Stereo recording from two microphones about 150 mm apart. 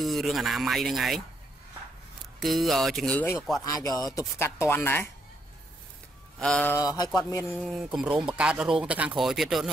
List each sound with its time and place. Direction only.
0.0 s speech: centre (ahead or behind)
2.4 s speech: centre (ahead or behind)
3.6 s a man's voice: 25° left (ahead or behind)
6.4 s speech: 5° left (ahead or behind)
6.7 s a man's voice: 25° left (ahead or behind)
7.5 s speech: 5° right (ahead or behind)